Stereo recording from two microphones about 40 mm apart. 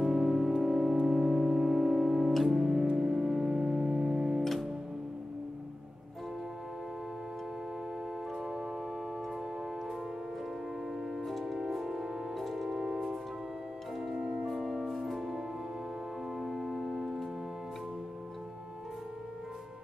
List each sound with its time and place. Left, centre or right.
0.0 s music: centre
8.4 s organ: centre
10.9 s tick-tock: centre
11.2 s music: centre
11.5 s music: centre
12.4 s music: centre
12.6 s music: centre
14.5 s music: centre
16.3 s organ: centre